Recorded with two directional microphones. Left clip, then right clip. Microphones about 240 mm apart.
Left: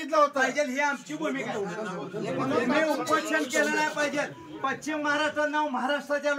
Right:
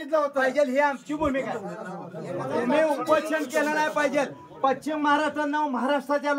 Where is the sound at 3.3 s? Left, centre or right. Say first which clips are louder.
Right 1 dB; right.